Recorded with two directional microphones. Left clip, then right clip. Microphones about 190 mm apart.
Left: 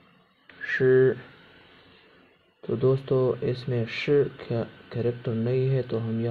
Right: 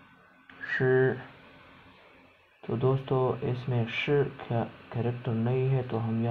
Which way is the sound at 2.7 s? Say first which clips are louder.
Left 5 dB; 25° left (ahead or behind).